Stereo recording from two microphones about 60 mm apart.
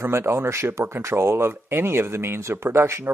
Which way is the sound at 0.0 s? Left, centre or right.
Right.